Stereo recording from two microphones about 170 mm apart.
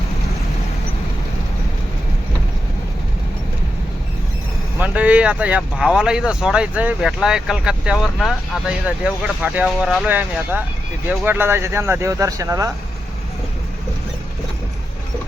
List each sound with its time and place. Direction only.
4.8 s speech: 10° right (ahead or behind)